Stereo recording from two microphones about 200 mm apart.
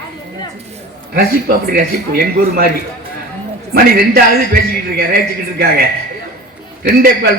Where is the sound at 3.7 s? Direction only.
50° right (ahead or behind).